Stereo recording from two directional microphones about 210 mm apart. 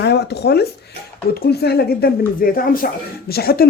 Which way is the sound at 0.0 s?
50° left (ahead or behind).